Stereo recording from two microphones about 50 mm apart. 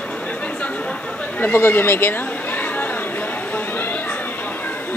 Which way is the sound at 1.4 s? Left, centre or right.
Left.